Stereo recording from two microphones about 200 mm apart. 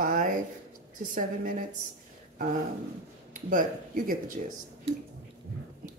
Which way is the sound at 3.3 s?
40° right (ahead or behind).